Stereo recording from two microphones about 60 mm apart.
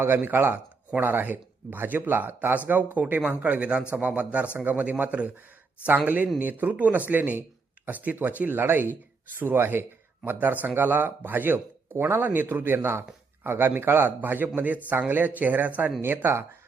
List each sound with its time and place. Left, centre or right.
0.0 s a man's voice: right
6.4 s a man's voice: right